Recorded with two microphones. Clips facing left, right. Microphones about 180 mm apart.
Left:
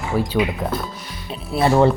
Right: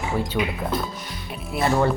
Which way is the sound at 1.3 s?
25° left (ahead or behind).